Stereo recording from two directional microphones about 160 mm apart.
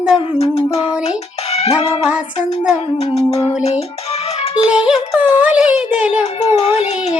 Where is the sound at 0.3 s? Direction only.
35° left (ahead or behind).